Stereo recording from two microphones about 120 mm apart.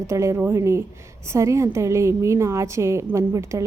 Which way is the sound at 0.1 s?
25° right (ahead or behind).